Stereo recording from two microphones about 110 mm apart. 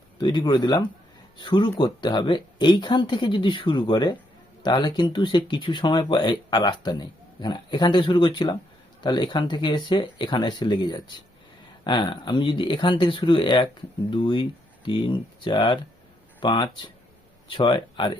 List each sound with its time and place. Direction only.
0.2 s speech: 40° left (ahead or behind)